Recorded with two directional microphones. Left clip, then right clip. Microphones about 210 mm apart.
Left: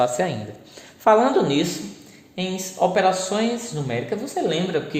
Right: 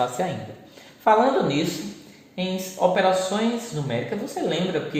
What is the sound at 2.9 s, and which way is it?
Speech, 45° left (ahead or behind).